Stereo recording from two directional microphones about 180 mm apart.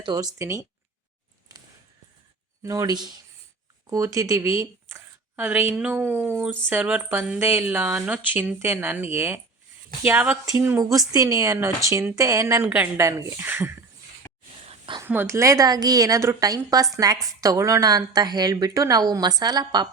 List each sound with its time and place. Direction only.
0.0 s a woman's voice: 20° right (ahead or behind)
2.6 s a woman's voice: 20° right (ahead or behind)
14.7 s whispering: 25° right (ahead or behind)
15.0 s a woman's voice: 10° right (ahead or behind)